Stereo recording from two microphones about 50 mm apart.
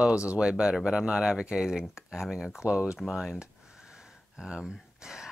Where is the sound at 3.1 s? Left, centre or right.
Centre.